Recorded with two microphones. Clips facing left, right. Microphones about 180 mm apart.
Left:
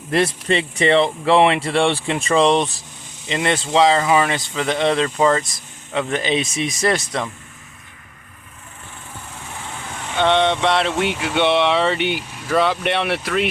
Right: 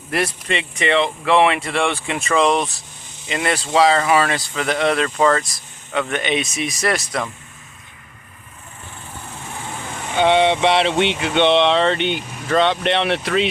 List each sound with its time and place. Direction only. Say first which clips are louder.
0.4 s speech: left 4 dB; 35° left (ahead or behind)
2.6 s speech: left 2 dB; centre (ahead or behind)
3.2 s speech: left 1 dB; 25° left (ahead or behind)
10.2 s speech: right 2 dB; 5° right (ahead or behind)